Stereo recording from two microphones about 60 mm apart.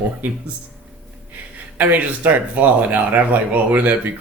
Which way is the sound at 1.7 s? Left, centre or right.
Right.